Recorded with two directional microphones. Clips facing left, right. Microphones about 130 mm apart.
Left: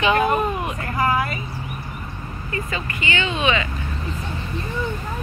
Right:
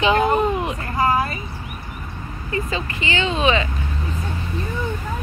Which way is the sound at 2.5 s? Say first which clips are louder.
Right 3 dB; 25° right (ahead or behind).